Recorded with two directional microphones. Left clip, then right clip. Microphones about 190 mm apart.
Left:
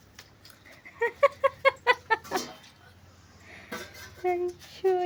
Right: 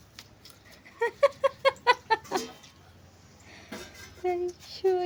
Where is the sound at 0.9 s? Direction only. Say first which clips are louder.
Left 1 dB; 5° right (ahead or behind).